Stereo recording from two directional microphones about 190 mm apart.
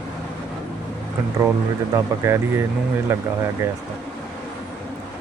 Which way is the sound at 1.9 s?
15° right (ahead or behind).